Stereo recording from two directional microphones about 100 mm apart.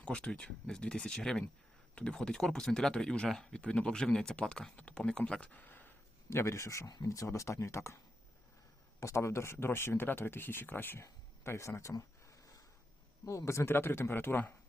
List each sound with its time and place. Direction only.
0.0 s speech: 10° left (ahead or behind)
6.3 s speech: 30° left (ahead or behind)
9.0 s speech: 30° left (ahead or behind)
13.2 s speech: 30° left (ahead or behind)